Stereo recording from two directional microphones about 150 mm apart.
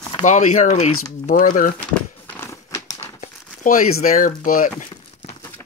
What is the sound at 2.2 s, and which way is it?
Crumpling, 15° left (ahead or behind).